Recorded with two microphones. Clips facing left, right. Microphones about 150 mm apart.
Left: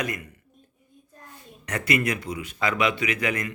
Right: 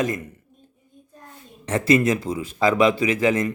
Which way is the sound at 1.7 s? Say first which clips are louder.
Right 7 dB; 25° right (ahead or behind).